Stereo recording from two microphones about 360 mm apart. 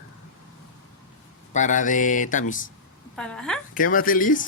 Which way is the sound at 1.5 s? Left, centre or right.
Left.